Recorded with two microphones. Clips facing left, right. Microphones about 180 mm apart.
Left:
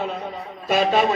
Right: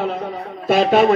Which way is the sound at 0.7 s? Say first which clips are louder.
Right 5 dB; 55° right (ahead or behind).